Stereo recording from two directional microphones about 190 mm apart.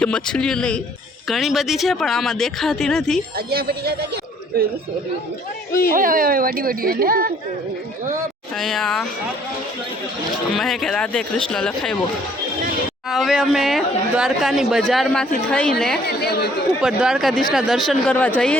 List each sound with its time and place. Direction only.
0.0 s speech: 5° left (ahead or behind)
3.3 s speech: 55° right (ahead or behind)
5.9 s speech: 45° right (ahead or behind)
8.5 s speech: centre (ahead or behind)
10.5 s speech: centre (ahead or behind)
13.1 s speech: centre (ahead or behind)
16.0 s speech: 55° left (ahead or behind)
16.8 s speech: 5° right (ahead or behind)